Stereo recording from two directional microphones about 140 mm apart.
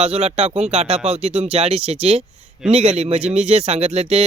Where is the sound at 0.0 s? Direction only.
45° right (ahead or behind).